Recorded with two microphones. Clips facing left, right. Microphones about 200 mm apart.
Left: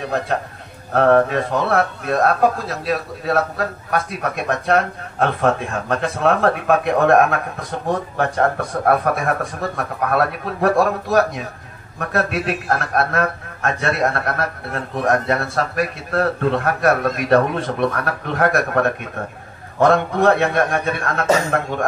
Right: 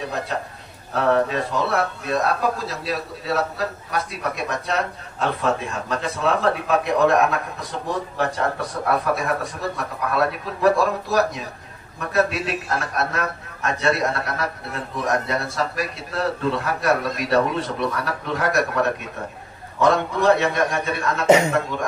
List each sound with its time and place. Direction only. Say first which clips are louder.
0.9 s a man's voice: left 5 dB; 55° left (ahead or behind)